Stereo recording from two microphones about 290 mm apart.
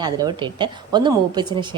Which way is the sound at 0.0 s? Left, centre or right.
Centre.